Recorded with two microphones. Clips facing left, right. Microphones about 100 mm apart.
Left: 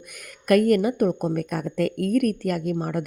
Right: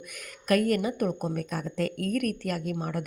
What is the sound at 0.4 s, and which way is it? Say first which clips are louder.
Speech: left 6 dB; 50° left (ahead or behind).